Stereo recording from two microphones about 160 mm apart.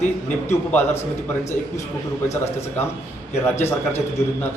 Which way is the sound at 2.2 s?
15° left (ahead or behind).